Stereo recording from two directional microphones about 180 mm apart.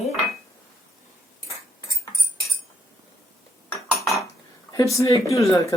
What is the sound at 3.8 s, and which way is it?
Cutlery, centre (ahead or behind).